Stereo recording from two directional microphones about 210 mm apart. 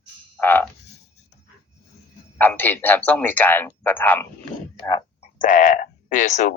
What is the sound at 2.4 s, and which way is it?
A man's voice, 10° left (ahead or behind).